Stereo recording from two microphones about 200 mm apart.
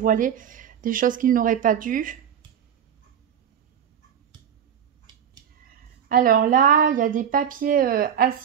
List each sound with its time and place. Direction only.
0.0 s a woman's voice: 40° right (ahead or behind)
5.7 s a woman's voice: 45° right (ahead or behind)